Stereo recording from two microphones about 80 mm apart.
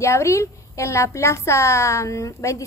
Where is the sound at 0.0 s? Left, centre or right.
Left.